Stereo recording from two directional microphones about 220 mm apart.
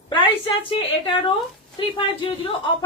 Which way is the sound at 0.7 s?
20° left (ahead or behind).